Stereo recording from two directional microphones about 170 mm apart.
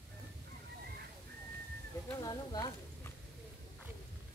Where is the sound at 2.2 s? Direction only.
20° left (ahead or behind).